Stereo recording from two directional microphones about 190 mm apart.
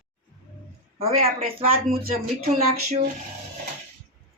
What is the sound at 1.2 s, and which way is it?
Speech, 50° right (ahead or behind).